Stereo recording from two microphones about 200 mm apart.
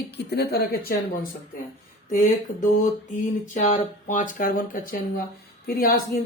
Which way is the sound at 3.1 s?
40° left (ahead or behind).